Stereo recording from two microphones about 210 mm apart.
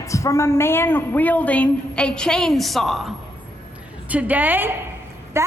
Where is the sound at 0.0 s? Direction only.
15° left (ahead or behind).